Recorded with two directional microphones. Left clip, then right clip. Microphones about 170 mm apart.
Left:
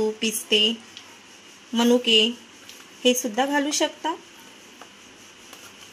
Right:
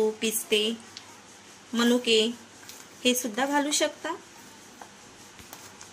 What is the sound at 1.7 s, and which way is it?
Speech, 40° left (ahead or behind).